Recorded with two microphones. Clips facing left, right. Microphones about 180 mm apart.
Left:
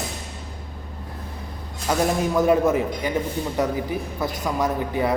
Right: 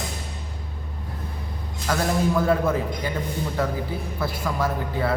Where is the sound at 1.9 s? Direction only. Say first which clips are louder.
Left 1 dB; 20° left (ahead or behind).